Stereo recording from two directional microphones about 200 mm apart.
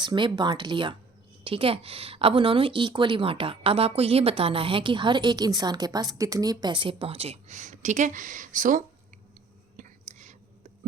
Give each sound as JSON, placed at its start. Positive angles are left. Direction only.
{"t": 0.0, "sound": "a woman's voice", "side_deg": -20}
{"t": 9.7, "sound": "whispering", "side_deg": -40}